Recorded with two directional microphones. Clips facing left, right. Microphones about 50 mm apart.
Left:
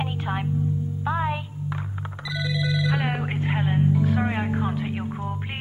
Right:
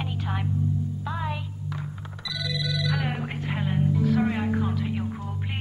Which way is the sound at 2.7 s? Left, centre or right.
Left.